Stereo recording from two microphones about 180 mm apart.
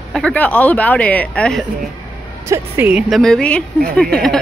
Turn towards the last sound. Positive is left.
turn(degrees=5)  # may be behind; listen again after turning